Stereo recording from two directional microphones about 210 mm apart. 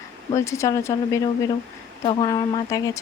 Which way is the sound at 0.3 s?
15° left (ahead or behind).